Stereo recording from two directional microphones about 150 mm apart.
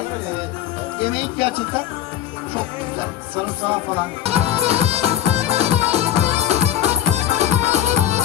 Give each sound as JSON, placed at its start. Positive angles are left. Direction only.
{"t": 0.9, "sound": "speech", "side_deg": -40}
{"t": 4.2, "sound": "music", "side_deg": -45}